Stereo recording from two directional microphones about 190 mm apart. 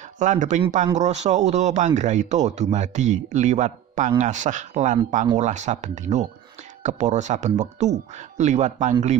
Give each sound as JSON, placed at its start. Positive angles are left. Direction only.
{"t": 0.2, "sound": "a man's voice", "side_deg": -40}